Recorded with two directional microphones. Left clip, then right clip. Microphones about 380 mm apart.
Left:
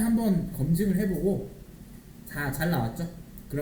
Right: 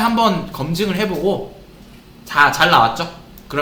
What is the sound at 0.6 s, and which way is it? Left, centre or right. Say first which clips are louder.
Speech: right 10 dB; right.